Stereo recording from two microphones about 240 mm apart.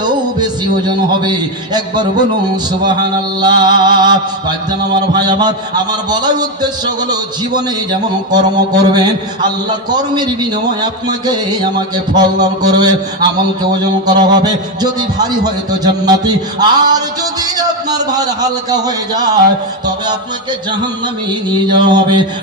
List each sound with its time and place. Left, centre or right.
0.0 s a man's voice: centre
3.4 s a man's voice: centre
8.3 s a man's voice: centre
12.1 s a man's voice: centre
14.1 s a man's voice: centre
21.8 s music: centre